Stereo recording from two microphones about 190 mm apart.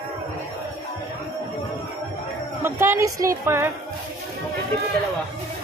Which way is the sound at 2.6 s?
10° right (ahead or behind).